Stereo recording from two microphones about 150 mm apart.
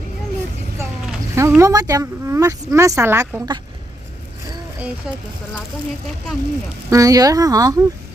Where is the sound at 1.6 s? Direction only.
20° right (ahead or behind).